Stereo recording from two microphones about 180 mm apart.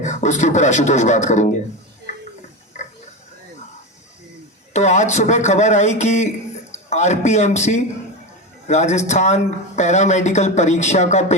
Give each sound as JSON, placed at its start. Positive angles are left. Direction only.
{"t": 0.0, "sound": "speech", "side_deg": 40}
{"t": 4.7, "sound": "a man's voice", "side_deg": 40}